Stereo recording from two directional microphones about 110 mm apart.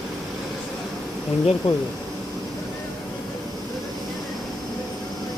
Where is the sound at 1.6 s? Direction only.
55° left (ahead or behind).